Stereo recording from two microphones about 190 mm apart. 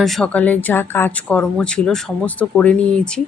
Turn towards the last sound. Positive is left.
turn(degrees=5)  # may be behind; listen again after turning